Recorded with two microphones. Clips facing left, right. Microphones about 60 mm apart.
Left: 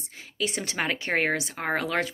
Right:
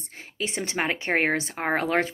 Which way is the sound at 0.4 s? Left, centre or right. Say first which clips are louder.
Right 1 dB; right.